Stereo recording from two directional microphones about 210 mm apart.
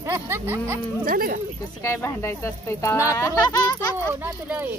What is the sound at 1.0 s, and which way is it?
Speech, 45° right (ahead or behind).